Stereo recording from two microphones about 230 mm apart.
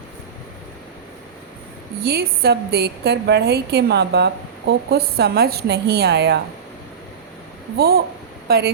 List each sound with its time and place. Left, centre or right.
2.0 s a woman's voice: right
7.8 s a woman's voice: right